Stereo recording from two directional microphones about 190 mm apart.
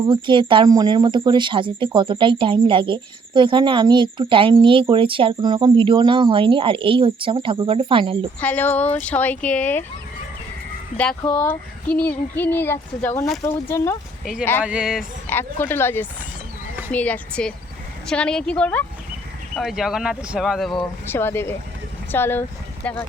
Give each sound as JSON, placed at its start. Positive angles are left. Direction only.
{"t": 0.1, "sound": "speech", "side_deg": -25}
{"t": 8.4, "sound": "speech", "side_deg": 10}
{"t": 10.9, "sound": "speech", "side_deg": 5}
{"t": 14.6, "sound": "speech", "side_deg": -5}
{"t": 15.3, "sound": "speech", "side_deg": 10}
{"t": 21.1, "sound": "speech", "side_deg": 10}